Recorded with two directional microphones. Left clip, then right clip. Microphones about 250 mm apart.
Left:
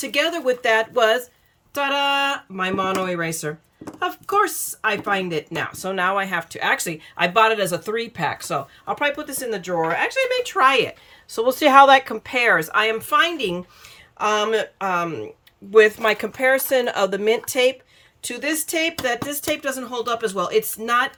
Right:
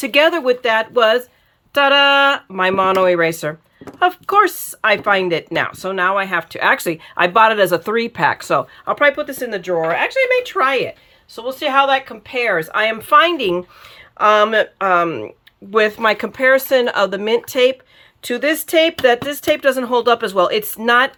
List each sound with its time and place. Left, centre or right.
0.0 s speech: centre
11.3 s speech: centre